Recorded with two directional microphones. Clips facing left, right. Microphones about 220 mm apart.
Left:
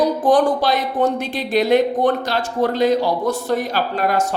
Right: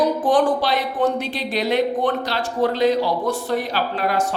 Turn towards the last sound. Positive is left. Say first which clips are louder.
# left 2 dB
turn(degrees=45)  # may be behind; listen again after turning